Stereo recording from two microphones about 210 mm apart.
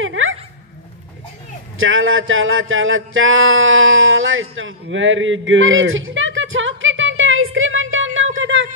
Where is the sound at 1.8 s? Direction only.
70° right (ahead or behind).